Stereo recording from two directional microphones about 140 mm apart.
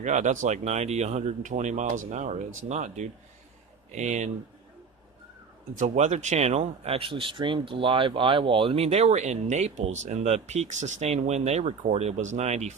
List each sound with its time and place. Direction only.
0.0 s speech: 60° right (ahead or behind)
5.7 s speech: 60° right (ahead or behind)